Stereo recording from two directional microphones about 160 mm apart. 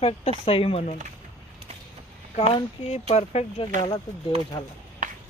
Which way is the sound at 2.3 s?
40° left (ahead or behind).